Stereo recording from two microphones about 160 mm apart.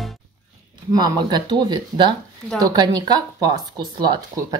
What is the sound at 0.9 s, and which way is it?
Speech, 25° right (ahead or behind).